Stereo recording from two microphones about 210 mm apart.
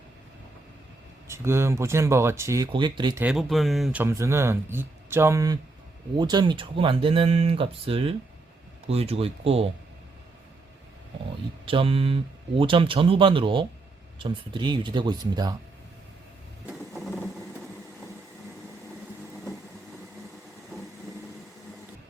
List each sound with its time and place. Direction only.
1.3 s speech: 10° right (ahead or behind)
3.2 s speech: 5° right (ahead or behind); by 9.6 s 30° right (ahead or behind)
11.6 s speech: 25° right (ahead or behind)
16.6 s a sound: centre (ahead or behind)